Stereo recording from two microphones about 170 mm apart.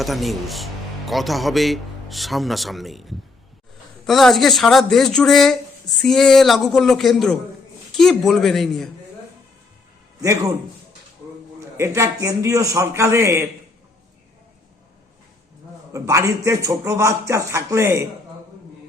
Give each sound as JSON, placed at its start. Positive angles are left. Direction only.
{"t": 0.0, "sound": "speech", "side_deg": 0}
{"t": 10.2, "sound": "a man's voice", "side_deg": -20}
{"t": 11.8, "sound": "a man's voice", "side_deg": -15}
{"t": 15.9, "sound": "a man's voice", "side_deg": -20}